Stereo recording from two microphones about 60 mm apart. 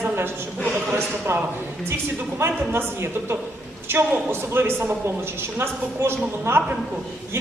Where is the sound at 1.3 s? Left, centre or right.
Right.